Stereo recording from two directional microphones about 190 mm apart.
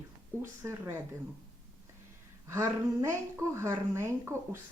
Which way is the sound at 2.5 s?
15° right (ahead or behind).